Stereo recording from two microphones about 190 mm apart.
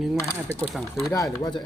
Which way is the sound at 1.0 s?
15° left (ahead or behind).